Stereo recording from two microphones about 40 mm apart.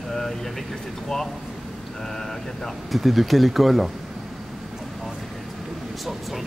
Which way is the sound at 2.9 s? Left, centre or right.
Centre.